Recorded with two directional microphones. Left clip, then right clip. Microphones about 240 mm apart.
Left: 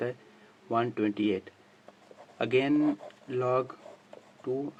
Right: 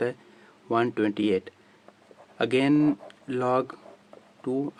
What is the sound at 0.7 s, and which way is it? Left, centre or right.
Speech, right.